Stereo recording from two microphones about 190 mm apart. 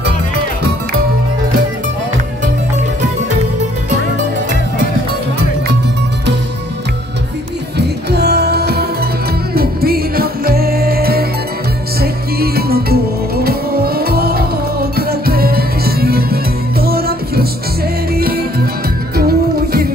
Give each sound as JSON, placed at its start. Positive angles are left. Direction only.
{"t": 7.7, "sound": "music", "side_deg": -60}